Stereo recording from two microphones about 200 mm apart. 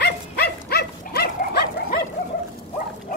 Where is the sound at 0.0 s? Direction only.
55° left (ahead or behind).